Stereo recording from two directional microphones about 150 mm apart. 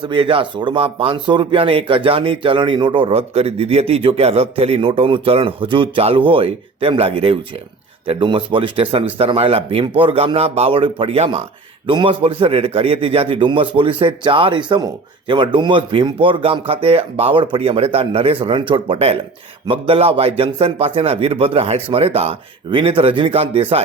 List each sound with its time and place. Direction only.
0.0 s speech: 35° right (ahead or behind)